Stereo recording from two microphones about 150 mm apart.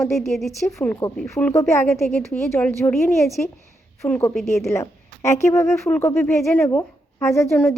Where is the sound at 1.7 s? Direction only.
20° left (ahead or behind).